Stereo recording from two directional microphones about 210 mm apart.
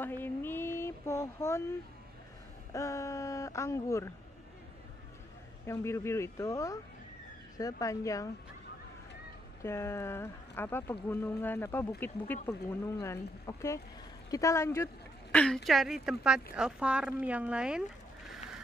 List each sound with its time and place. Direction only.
0.0 s a sound: 10° left (ahead or behind)
2.7 s speech: 15° left (ahead or behind)
5.7 s speech: 15° left (ahead or behind)
9.6 s speech: 10° left (ahead or behind); by 17.8 s 5° right (ahead or behind)